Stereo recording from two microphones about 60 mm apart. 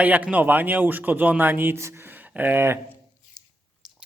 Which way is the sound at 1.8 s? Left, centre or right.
Right.